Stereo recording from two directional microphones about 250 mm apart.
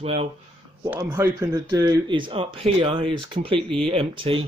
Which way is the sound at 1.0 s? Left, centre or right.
Centre.